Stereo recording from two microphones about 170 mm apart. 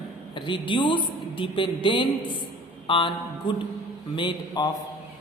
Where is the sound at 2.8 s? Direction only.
30° left (ahead or behind).